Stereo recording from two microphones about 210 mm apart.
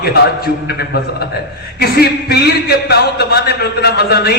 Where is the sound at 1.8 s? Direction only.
50° left (ahead or behind).